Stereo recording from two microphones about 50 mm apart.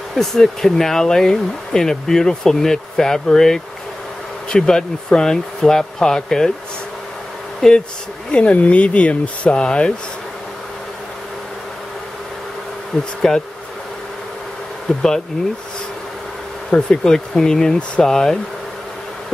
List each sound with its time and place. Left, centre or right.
0.1 s speech: centre
7.6 s speech: centre
8.5 s speech: left
12.9 s speech: centre
15.0 s speech: centre
16.7 s speech: centre